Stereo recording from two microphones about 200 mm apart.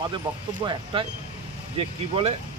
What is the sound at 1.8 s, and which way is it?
Speech, 30° right (ahead or behind).